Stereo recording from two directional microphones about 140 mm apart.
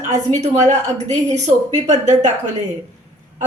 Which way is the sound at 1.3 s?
55° right (ahead or behind).